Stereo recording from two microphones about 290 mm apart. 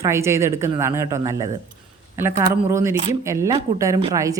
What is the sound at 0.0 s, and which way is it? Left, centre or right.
A woman's voice, centre.